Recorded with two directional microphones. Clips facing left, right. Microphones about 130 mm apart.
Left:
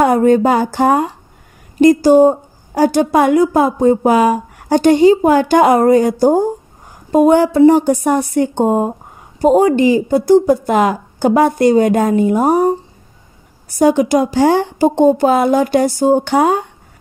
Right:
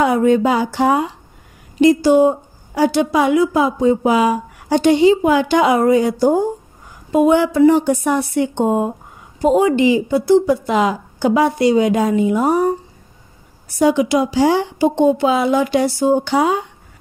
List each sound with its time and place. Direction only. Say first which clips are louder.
0.0 s a woman's voice: left 3 dB; 45° left (ahead or behind)